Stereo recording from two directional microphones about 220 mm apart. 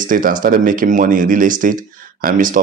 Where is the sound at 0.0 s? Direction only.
40° right (ahead or behind).